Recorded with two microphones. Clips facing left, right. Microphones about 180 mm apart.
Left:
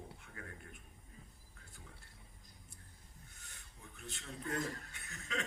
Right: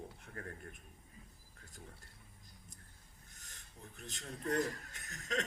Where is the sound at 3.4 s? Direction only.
40° right (ahead or behind).